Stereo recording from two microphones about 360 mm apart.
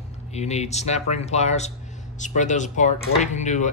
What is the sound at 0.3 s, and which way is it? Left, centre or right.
Speech, centre.